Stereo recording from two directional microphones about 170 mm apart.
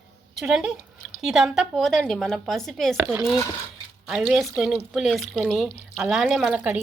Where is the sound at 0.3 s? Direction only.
5° right (ahead or behind).